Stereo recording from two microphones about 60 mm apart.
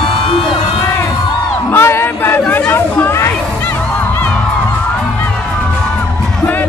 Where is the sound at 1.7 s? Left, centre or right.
Left.